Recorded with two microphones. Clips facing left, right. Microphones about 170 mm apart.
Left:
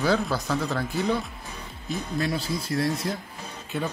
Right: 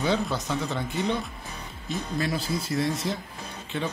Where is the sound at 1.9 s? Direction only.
Centre (ahead or behind).